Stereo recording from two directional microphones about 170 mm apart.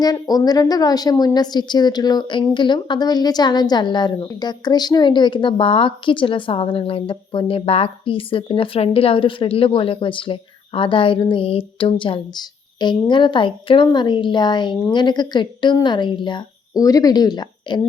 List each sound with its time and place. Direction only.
0.0 s a woman's voice: 20° left (ahead or behind)